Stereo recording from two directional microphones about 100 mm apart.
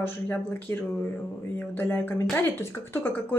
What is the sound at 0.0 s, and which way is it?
Speech, 20° left (ahead or behind).